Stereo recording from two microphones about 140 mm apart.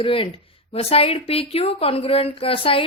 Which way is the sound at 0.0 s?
40° left (ahead or behind).